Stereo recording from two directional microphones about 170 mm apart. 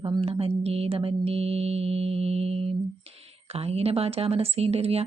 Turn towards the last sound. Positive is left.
turn(degrees=-35)  # may be behind; listen again after turning